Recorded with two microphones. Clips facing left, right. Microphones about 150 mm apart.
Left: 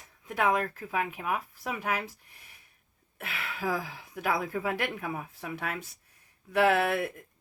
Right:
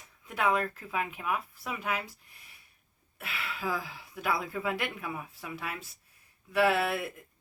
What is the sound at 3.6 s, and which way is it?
Speech, 45° left (ahead or behind).